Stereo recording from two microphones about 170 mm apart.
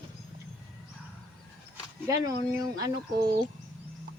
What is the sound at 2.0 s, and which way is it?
Speech, 20° right (ahead or behind).